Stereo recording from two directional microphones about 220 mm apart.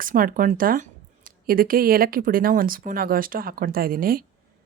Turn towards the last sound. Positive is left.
turn(degrees=-40)  # may be behind; listen again after turning